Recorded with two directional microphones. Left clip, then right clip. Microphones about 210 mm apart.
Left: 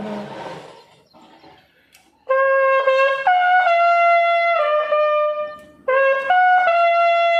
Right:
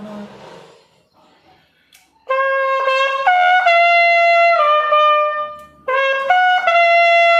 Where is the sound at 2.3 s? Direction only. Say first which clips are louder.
Left 1 dB; 35° right (ahead or behind).